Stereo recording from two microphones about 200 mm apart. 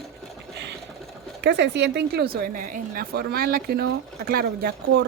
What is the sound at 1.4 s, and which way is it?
A woman's voice, 60° right (ahead or behind).